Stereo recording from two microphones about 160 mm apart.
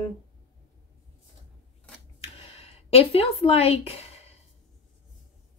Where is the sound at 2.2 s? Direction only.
40° left (ahead or behind).